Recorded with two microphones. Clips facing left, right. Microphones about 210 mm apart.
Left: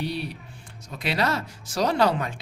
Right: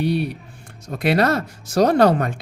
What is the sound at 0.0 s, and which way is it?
Speech, 55° right (ahead or behind).